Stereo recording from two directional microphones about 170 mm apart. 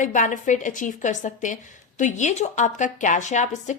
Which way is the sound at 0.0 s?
50° left (ahead or behind).